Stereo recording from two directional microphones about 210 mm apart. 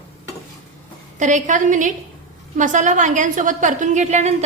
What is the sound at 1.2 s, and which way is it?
A woman's voice, 35° right (ahead or behind).